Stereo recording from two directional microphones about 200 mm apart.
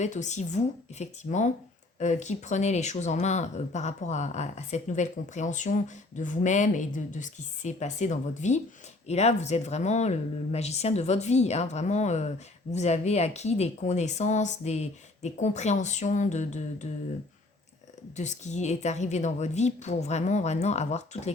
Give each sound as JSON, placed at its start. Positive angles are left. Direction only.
{"t": 0.0, "sound": "speech", "side_deg": 35}
{"t": 18.2, "sound": "speech", "side_deg": 35}